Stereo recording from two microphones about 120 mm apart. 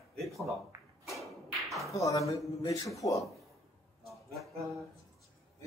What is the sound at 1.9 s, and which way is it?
Speech, 25° left (ahead or behind).